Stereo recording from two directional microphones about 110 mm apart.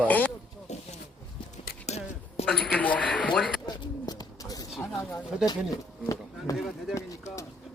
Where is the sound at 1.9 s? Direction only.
70° left (ahead or behind).